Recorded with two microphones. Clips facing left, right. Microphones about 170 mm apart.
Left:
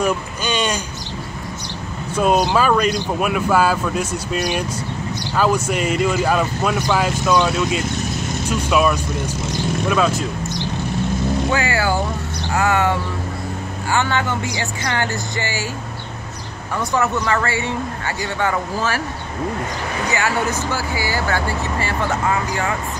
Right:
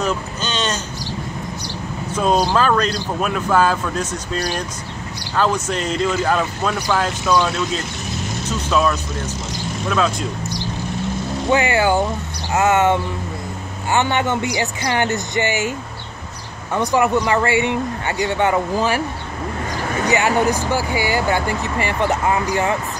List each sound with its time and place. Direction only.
0.0 s a sound: 10° left (ahead or behind)
2.1 s speech: 10° left (ahead or behind)
11.5 s speech: 20° right (ahead or behind)
16.7 s speech: 15° right (ahead or behind)
20.1 s speech: 20° right (ahead or behind)